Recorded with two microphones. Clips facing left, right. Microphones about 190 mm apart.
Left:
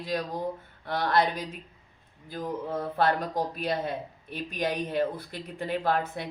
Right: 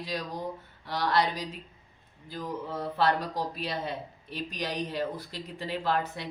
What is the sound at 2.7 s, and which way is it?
Speech, 50° left (ahead or behind).